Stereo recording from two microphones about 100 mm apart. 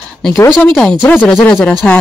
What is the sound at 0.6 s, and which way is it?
Speech, 5° left (ahead or behind).